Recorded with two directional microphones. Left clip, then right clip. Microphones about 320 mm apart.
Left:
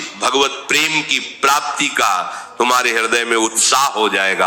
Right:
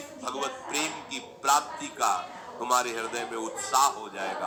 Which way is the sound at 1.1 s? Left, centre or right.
Left.